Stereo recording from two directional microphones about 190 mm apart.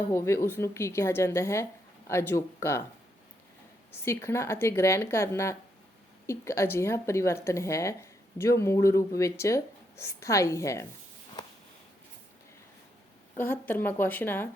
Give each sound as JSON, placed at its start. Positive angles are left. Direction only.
{"t": 0.1, "sound": "a woman's voice", "side_deg": 15}
{"t": 4.0, "sound": "a woman's voice", "side_deg": 15}
{"t": 11.4, "sound": "a sound", "side_deg": 20}
{"t": 13.4, "sound": "a woman's voice", "side_deg": 10}